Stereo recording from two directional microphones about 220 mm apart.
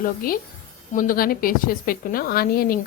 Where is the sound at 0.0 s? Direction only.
40° left (ahead or behind).